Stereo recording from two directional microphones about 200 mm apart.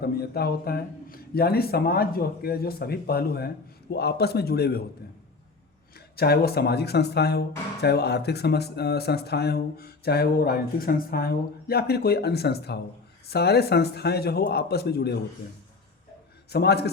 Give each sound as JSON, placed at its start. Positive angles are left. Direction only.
{"t": 0.0, "sound": "speech", "side_deg": 50}
{"t": 6.1, "sound": "speech", "side_deg": 50}
{"t": 16.5, "sound": "speech", "side_deg": 55}